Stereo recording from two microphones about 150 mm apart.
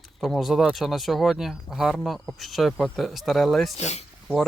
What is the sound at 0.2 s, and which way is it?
Speech, centre (ahead or behind).